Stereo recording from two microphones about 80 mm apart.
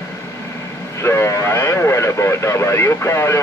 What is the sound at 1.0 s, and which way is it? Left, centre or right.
Speech, left.